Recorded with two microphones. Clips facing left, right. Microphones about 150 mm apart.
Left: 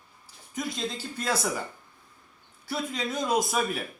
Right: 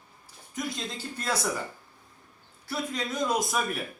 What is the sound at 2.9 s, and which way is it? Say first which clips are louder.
Speech: left 1 dB; 10° left (ahead or behind).